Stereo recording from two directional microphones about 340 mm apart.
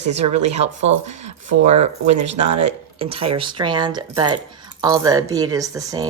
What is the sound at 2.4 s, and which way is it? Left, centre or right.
Speech, right.